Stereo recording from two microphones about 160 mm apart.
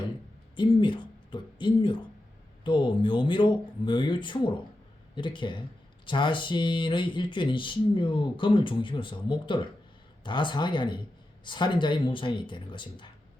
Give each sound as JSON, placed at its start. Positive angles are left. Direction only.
{"t": 0.5, "sound": "speech", "side_deg": 30}